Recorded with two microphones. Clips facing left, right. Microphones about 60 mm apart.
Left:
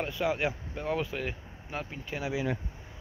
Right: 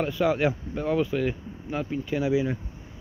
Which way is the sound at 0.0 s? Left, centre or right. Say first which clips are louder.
Right 6 dB; centre.